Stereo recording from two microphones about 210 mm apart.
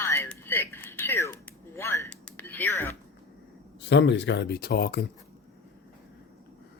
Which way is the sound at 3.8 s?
55° left (ahead or behind).